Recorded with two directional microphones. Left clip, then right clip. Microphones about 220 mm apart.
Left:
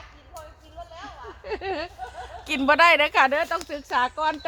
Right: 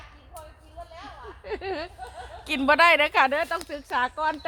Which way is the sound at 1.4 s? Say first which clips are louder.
Left 2 dB; 15° right (ahead or behind).